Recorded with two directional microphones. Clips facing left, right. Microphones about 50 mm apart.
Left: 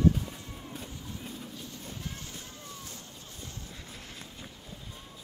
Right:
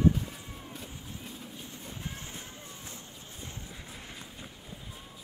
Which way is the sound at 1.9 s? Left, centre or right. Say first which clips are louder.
Right 2 dB; right.